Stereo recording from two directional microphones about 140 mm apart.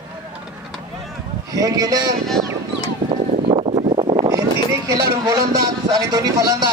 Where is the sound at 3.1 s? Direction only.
45° right (ahead or behind).